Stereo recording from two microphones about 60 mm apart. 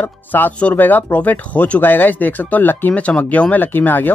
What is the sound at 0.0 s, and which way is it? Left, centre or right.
Speech, left.